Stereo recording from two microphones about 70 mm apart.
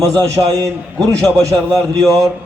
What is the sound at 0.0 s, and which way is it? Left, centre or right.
A man's voice, right.